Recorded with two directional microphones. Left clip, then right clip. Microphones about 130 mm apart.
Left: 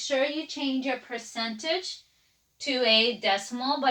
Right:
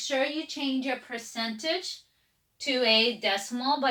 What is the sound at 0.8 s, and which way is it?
Speech, 30° right (ahead or behind).